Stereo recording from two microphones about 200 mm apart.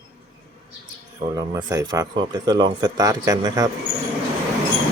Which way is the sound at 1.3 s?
20° right (ahead or behind).